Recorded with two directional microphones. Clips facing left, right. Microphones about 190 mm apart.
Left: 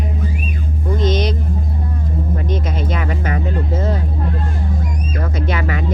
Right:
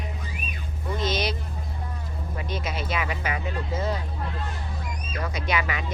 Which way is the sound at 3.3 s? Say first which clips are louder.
Left 8 dB; 45° left (ahead or behind).